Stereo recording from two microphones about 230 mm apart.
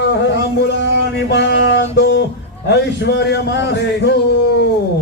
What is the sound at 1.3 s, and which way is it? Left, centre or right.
A man's voice, left.